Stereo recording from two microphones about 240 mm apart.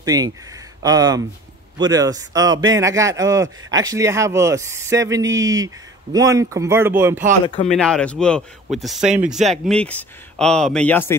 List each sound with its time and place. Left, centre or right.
0.0 s speech: centre
7.6 s speech: centre